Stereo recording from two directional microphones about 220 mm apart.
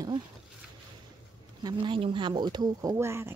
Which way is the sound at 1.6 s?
20° right (ahead or behind).